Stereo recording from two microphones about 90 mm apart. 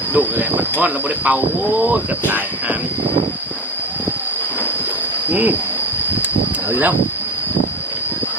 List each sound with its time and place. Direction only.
0.1 s speech: 20° right (ahead or behind)
5.3 s speech: 20° right (ahead or behind)
6.7 s speech: 20° right (ahead or behind)